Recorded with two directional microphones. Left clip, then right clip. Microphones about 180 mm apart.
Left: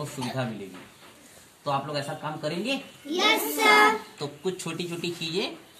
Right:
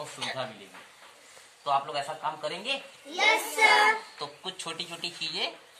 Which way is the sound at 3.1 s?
35° right (ahead or behind).